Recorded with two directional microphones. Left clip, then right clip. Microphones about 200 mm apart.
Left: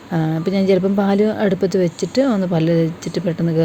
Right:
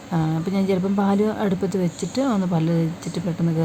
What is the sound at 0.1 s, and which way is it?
Speech, 10° left (ahead or behind).